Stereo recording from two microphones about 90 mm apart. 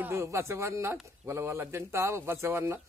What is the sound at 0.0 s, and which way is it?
A man's voice, 30° right (ahead or behind).